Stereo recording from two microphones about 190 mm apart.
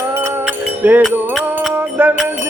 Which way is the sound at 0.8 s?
5° right (ahead or behind).